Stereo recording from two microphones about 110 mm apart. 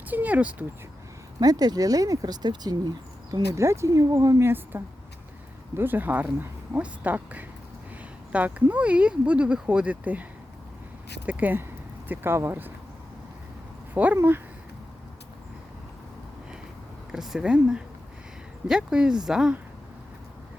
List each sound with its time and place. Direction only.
0.1 s speech: 15° right (ahead or behind)
1.4 s speech: 35° right (ahead or behind)
3.5 s speech: 25° right (ahead or behind)
11.3 s speech: 15° right (ahead or behind)
13.9 s speech: 15° right (ahead or behind)
17.1 s speech: 5° right (ahead or behind)